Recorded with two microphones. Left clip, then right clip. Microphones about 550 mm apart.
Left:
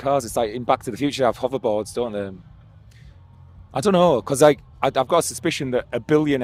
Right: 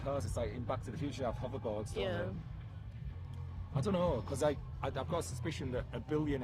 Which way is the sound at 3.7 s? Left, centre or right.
Left.